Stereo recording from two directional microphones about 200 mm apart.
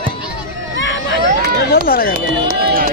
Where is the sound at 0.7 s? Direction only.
65° left (ahead or behind).